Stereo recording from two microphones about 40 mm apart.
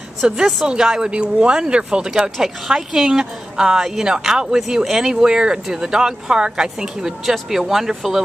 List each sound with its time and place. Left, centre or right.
0.2 s a woman's voice: centre; by 2.0 s right
2.7 s speech: centre